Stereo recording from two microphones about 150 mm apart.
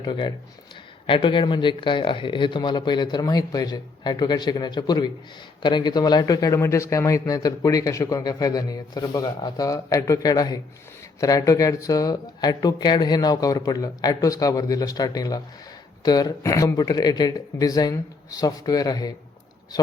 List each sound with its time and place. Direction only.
0.0 s speech: 30° left (ahead or behind)